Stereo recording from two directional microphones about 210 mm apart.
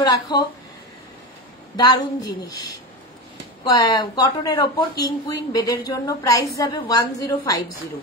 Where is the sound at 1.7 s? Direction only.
20° left (ahead or behind).